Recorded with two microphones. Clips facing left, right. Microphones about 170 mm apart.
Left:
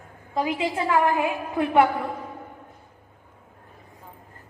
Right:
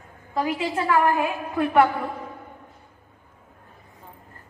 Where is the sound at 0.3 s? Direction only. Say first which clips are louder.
Even; 15° left (ahead or behind).